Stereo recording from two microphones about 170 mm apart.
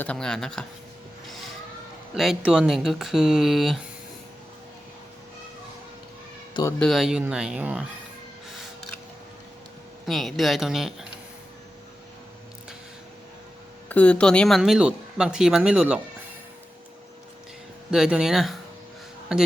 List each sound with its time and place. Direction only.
0.0 s speech: 5° left (ahead or behind)
2.1 s speech: centre (ahead or behind)
6.5 s speech: 20° left (ahead or behind)
6.7 s speech: centre (ahead or behind)
10.1 s speech: centre (ahead or behind)
13.8 s speech: 10° left (ahead or behind)
17.9 s speech: 5° right (ahead or behind)